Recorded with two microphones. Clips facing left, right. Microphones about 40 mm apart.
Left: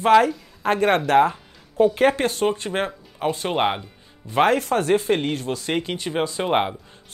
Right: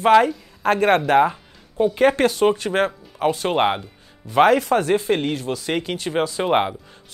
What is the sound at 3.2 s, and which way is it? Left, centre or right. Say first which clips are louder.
Speech: right 4 dB; right.